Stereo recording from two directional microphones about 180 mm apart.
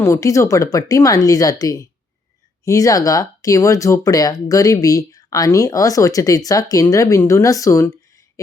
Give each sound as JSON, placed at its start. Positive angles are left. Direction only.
{"t": 0.0, "sound": "speech", "side_deg": 15}